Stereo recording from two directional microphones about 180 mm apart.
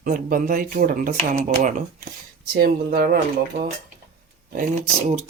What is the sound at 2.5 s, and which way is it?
Speech, 60° right (ahead or behind).